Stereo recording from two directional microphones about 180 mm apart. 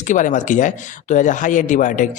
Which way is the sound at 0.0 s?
45° left (ahead or behind).